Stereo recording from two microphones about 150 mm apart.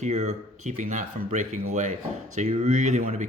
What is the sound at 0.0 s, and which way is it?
Speech, 50° right (ahead or behind).